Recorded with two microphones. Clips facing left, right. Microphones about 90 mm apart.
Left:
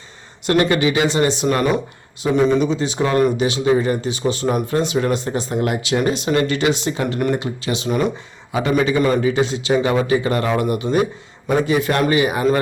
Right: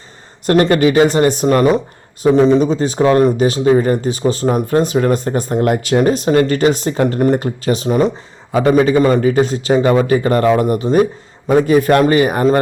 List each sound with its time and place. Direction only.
0.4 s a man's voice: 40° right (ahead or behind)